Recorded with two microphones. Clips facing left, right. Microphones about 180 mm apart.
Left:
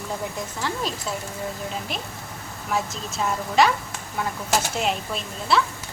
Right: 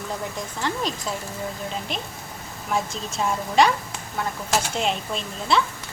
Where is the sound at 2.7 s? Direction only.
Centre (ahead or behind).